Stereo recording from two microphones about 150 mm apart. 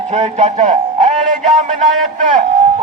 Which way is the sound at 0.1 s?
50° right (ahead or behind).